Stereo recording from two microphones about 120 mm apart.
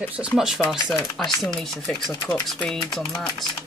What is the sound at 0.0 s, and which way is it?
Speech, 10° right (ahead or behind).